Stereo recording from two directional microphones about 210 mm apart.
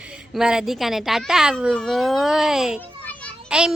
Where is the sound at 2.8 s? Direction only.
5° left (ahead or behind).